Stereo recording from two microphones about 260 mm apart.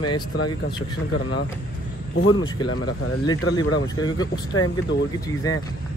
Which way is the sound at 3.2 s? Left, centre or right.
Centre.